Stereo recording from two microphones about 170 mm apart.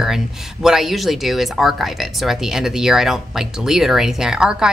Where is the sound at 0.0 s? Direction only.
Centre (ahead or behind).